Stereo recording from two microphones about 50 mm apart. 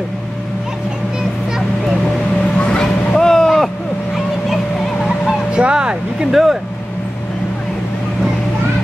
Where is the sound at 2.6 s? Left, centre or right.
Centre.